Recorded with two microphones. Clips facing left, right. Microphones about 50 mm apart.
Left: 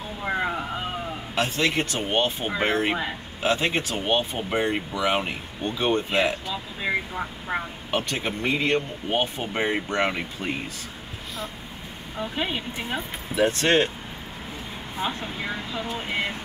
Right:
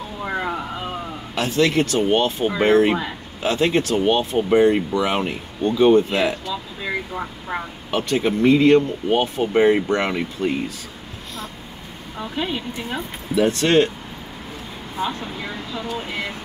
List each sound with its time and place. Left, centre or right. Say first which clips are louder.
0.2 s a sound: right 1 dB; centre
1.5 s speech: right 11 dB; centre
6.4 s speech: right 1 dB; centre
7.1 s speech: right 2 dB; centre
12.2 s speech: right 2 dB; centre
15.0 s speech: right 3 dB; centre